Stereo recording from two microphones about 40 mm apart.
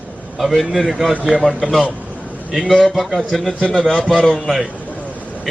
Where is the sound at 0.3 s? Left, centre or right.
Centre.